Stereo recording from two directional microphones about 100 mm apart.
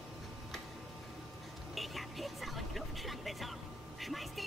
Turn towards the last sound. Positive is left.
turn(degrees=0)  # may be behind; listen again after turning